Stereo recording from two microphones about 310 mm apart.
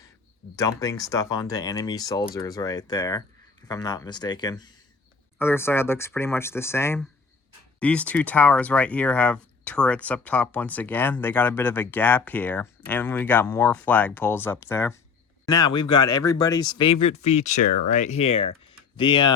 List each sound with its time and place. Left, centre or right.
0.5 s speech: centre
17.6 s speech: left
17.9 s speech: left